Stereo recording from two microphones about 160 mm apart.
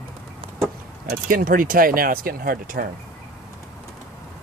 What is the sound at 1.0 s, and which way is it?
Speech, 65° right (ahead or behind).